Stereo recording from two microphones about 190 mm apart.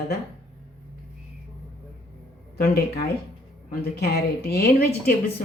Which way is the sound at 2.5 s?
55° left (ahead or behind).